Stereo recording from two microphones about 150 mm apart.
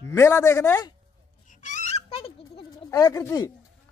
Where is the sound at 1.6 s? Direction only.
55° left (ahead or behind).